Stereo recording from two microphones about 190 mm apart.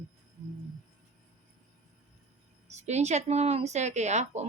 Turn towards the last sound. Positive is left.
turn(degrees=-35)  # may be behind; listen again after turning